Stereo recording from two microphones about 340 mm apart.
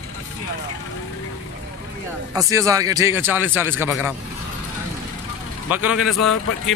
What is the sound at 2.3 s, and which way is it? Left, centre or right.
A man's voice, centre.